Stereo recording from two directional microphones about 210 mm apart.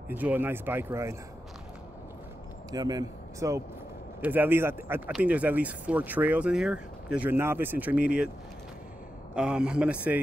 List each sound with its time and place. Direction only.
0.1 s speech: 10° right (ahead or behind)
2.7 s speech: 20° right (ahead or behind)
9.3 s a man's voice: 5° right (ahead or behind)